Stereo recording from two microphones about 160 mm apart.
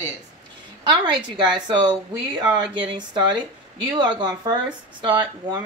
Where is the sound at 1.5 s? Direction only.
25° right (ahead or behind).